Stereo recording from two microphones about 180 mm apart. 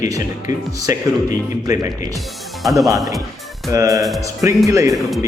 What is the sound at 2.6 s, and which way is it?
Speech, centre (ahead or behind).